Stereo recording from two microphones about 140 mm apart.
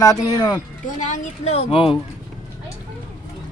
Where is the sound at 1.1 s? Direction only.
45° left (ahead or behind).